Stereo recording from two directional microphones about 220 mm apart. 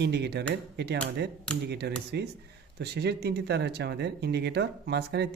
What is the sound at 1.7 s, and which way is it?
Speech, 50° right (ahead or behind).